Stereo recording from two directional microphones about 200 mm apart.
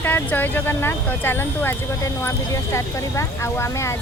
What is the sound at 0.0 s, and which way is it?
Speech, 10° left (ahead or behind).